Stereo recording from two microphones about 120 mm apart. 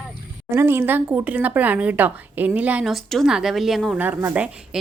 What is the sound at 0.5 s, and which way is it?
Speech, 20° right (ahead or behind).